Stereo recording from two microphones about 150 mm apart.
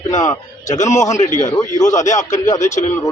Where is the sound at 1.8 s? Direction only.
20° left (ahead or behind).